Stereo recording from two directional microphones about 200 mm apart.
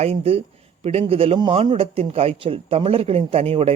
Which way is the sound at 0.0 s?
30° right (ahead or behind).